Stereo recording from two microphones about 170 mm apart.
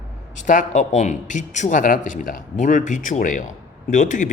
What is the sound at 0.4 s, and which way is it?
A man's voice, 45° left (ahead or behind).